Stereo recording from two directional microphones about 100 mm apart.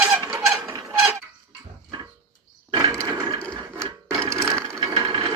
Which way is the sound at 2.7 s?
45° right (ahead or behind).